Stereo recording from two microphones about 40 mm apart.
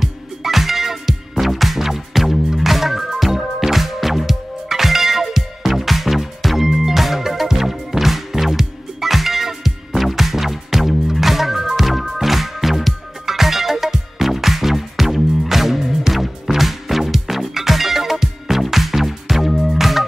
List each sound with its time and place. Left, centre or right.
0.0 s music: centre